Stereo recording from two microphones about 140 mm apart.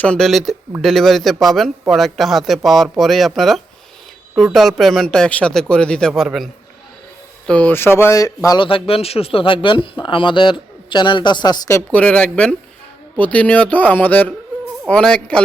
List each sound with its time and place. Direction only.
0.0 s a man's voice: 5° left (ahead or behind)
7.4 s speech: 10° left (ahead or behind)
8.6 s speech: 40° left (ahead or behind)
11.9 s speech: 10° left (ahead or behind)